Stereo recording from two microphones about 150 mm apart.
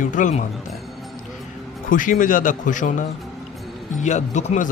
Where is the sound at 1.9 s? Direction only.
65° left (ahead or behind).